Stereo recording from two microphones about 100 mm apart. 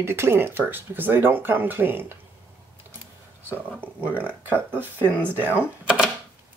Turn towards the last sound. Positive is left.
turn(degrees=-10)  # may be behind; listen again after turning